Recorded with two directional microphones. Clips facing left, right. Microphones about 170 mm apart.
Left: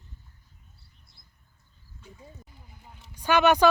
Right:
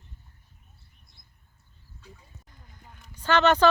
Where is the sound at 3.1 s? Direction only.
10° left (ahead or behind).